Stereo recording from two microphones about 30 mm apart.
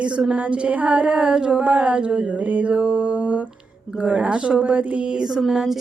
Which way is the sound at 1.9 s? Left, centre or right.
Right.